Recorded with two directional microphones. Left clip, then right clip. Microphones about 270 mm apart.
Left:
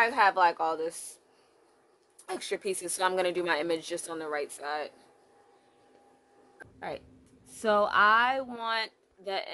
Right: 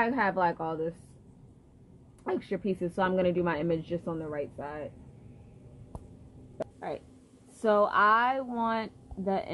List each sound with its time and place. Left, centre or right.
0.0 s a woman's voice: centre
2.2 s a woman's voice: centre
7.6 s a woman's voice: centre